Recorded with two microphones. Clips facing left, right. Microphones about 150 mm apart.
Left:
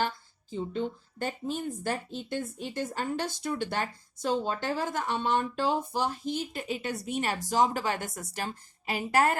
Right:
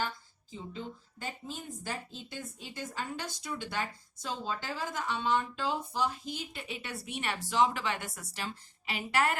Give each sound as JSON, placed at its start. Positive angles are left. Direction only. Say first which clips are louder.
{"t": 0.7, "sound": "speech", "louder": "left 9 dB", "side_deg": 60}